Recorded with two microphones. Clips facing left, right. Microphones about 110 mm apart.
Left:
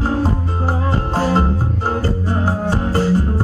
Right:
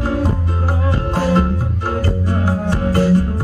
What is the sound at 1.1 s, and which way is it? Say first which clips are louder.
Music: right 1 dB; 35° left (ahead or behind).